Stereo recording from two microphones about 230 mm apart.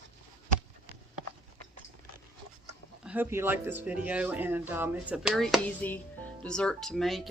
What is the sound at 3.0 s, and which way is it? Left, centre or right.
Speech, centre.